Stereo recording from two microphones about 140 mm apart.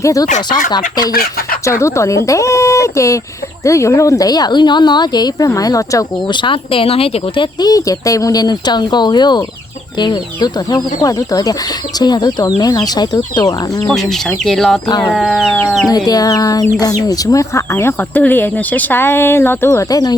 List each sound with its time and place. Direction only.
0.0 s speech: 25° left (ahead or behind)
1.8 s speech: 20° left (ahead or behind); by 7.4 s 45° left (ahead or behind)
7.6 s speech: 25° left (ahead or behind)
13.8 s speech: centre (ahead or behind)
14.8 s speech: 30° left (ahead or behind)
15.1 s speech: 5° left (ahead or behind)
16.0 s speech: 25° left (ahead or behind)